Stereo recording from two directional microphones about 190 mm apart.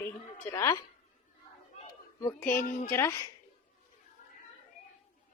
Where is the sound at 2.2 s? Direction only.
15° left (ahead or behind).